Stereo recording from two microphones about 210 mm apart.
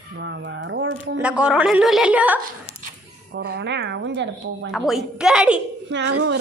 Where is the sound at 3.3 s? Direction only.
50° right (ahead or behind).